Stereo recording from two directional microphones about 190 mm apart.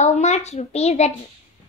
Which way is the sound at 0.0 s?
35° left (ahead or behind).